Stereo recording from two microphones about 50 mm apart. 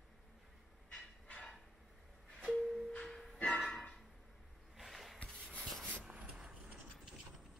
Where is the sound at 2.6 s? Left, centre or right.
Centre.